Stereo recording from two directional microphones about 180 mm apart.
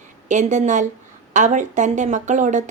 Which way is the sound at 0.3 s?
40° right (ahead or behind).